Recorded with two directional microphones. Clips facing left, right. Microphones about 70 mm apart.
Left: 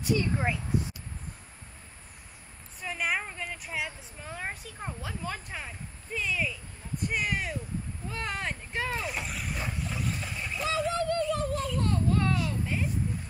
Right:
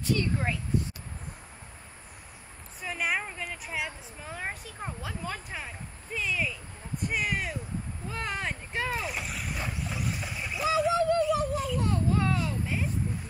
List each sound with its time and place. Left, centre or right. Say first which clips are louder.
0.0 s speech: left 1 dB; centre
2.8 s a woman's voice: even; centre